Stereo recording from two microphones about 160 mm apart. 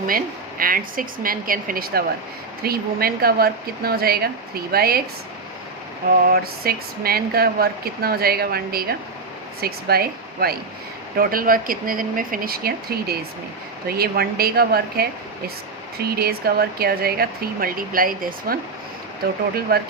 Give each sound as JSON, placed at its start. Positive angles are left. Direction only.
{"t": 0.6, "sound": "speech", "side_deg": -60}
{"t": 6.1, "sound": "speech", "side_deg": -70}
{"t": 19.7, "sound": "speech", "side_deg": -70}